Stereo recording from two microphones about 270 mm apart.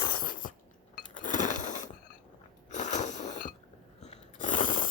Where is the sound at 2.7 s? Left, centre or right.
Left.